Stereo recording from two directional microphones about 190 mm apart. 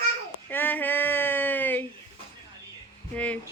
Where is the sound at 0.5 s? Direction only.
10° left (ahead or behind).